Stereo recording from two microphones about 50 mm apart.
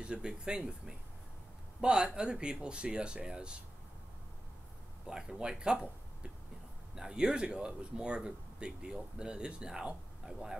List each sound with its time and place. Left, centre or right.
0.0 s speech: centre
5.0 s speech: centre